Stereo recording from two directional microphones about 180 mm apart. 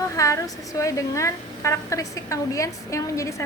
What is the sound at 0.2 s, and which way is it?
Speech, 15° left (ahead or behind).